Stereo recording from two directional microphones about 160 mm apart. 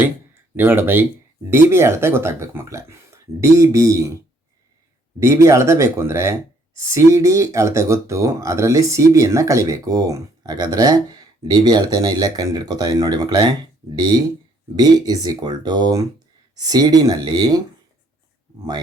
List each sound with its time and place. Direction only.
0.5 s speech: 10° right (ahead or behind)
5.2 s speech: 20° right (ahead or behind)